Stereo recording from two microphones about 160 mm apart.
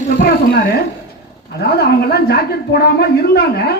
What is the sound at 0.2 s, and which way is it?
A woman's voice, 80° left.